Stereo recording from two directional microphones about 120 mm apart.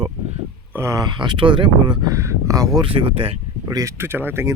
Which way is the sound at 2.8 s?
50° right (ahead or behind).